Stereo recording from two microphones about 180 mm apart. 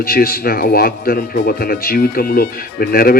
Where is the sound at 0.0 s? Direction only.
55° left (ahead or behind).